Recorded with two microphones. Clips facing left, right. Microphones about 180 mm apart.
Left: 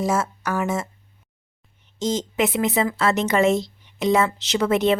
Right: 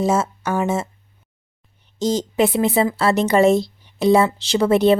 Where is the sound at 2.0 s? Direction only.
35° right (ahead or behind).